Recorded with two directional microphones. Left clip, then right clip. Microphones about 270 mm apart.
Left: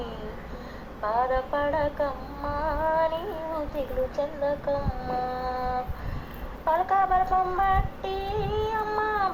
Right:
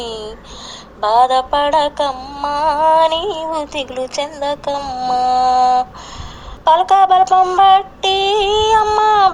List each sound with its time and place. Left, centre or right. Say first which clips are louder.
1.0 s female singing: right 13 dB; right